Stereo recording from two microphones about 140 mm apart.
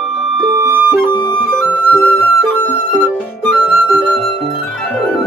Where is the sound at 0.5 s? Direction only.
20° right (ahead or behind).